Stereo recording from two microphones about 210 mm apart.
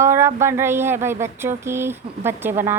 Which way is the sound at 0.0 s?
15° right (ahead or behind).